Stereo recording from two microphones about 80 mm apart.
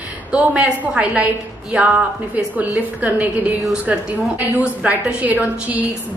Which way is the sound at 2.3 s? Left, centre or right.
Centre.